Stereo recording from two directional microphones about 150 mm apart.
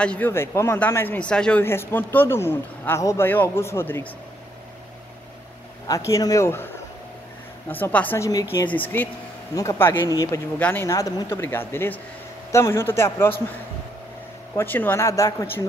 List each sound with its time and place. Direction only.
0.0 s speech: 10° left (ahead or behind)
5.9 s speech: 20° left (ahead or behind)
8.3 s speech: 20° left (ahead or behind)
8.6 s speech: 10° left (ahead or behind)
10.6 s speech: 15° left (ahead or behind)
14.5 s speech: 15° left (ahead or behind)